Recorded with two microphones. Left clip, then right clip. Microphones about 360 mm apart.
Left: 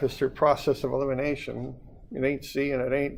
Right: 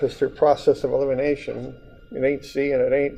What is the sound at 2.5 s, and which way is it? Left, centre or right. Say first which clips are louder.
Speech: right 8 dB; left.